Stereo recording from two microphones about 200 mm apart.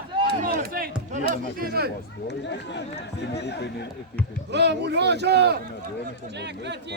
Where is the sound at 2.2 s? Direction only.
60° left (ahead or behind).